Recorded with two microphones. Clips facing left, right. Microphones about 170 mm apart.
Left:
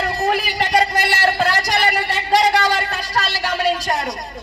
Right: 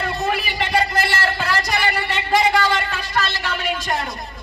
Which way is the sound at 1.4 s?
30° left (ahead or behind).